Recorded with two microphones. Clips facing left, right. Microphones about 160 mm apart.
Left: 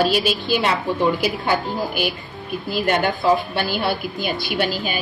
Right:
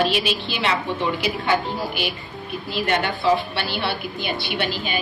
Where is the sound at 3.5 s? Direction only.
45° left (ahead or behind).